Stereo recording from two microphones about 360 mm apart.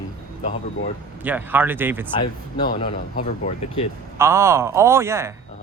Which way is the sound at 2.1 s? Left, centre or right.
Left.